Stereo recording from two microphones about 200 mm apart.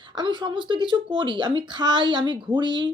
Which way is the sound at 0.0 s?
25° right (ahead or behind).